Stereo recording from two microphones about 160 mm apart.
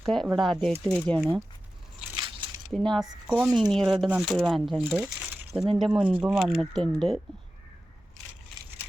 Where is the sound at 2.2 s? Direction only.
25° right (ahead or behind).